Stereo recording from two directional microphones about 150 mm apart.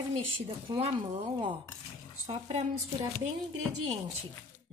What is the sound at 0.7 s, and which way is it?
Speech, 40° right (ahead or behind).